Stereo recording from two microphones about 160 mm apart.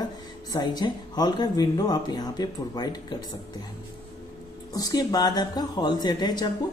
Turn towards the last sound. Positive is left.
turn(degrees=25)  # may be behind; listen again after turning